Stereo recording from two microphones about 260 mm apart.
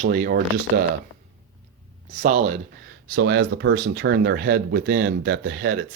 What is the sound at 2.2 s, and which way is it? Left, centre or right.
Speech, right.